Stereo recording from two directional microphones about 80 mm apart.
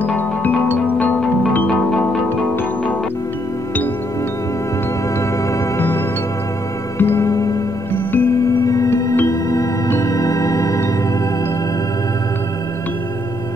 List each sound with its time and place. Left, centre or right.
0.0 s music: left
7.0 s music: left
7.2 s music: left
7.9 s music: left
8.6 s music: left
9.8 s organ: left